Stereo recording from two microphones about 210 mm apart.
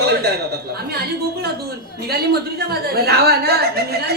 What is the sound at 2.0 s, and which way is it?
A woman's voice, 50° right (ahead or behind).